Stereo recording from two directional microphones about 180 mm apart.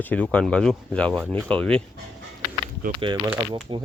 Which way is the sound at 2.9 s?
30° right (ahead or behind).